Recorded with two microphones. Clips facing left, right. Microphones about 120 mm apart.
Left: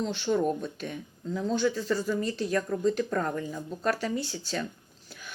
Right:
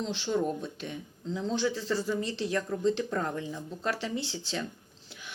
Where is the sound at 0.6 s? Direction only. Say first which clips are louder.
Left 2 dB; 20° right (ahead or behind).